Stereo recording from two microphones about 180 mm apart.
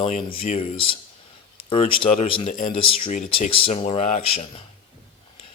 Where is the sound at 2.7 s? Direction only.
30° left (ahead or behind).